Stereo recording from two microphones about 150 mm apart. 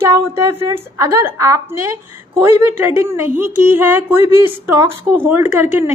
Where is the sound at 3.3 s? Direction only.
60° right (ahead or behind).